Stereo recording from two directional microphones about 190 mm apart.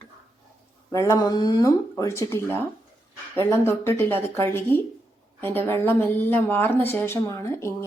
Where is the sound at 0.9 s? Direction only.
15° left (ahead or behind).